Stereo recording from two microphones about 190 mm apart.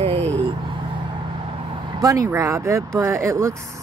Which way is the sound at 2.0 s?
20° right (ahead or behind).